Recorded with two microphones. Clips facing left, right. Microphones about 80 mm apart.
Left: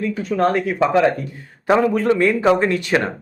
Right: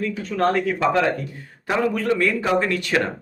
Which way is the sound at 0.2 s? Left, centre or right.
Centre.